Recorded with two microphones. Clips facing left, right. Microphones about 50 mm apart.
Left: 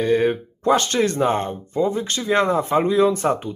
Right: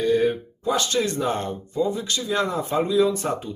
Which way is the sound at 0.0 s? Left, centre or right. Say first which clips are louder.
Left 2 dB; left.